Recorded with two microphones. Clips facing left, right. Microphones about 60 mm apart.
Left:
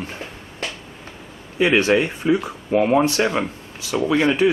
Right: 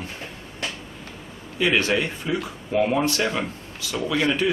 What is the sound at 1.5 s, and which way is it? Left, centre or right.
Speech, left.